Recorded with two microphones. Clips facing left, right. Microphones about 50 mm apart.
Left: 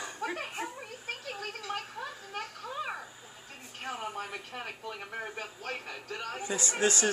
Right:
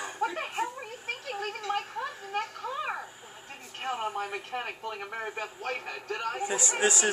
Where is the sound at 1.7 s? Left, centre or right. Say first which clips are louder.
Right 6 dB; right.